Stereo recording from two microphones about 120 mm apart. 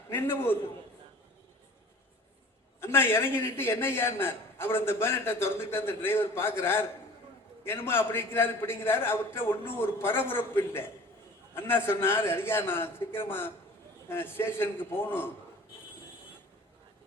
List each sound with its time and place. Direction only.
0.1 s a man's voice: 20° left (ahead or behind)
2.8 s a man's voice: 20° left (ahead or behind)